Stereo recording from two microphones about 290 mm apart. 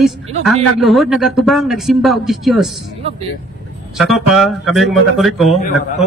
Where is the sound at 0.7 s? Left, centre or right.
Centre.